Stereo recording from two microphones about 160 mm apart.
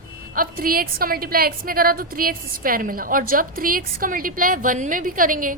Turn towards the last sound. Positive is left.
turn(degrees=-60)  # may be behind; listen again after turning